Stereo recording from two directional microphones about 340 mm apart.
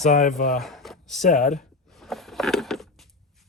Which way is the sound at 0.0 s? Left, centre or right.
Left.